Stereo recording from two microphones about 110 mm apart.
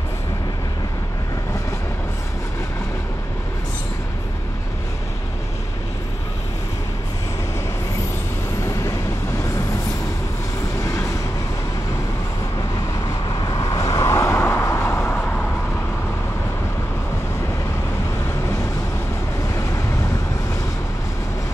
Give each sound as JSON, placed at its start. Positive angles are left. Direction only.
{"t": 10.8, "sound": "train", "side_deg": 25}
{"t": 12.5, "sound": "vehicle", "side_deg": 35}
{"t": 19.5, "sound": "vehicle", "side_deg": 25}